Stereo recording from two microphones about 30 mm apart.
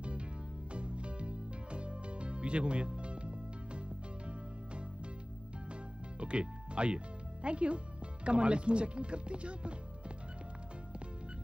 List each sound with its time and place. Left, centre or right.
0.0 s music: right
5.7 s music: right
7.4 s speech: right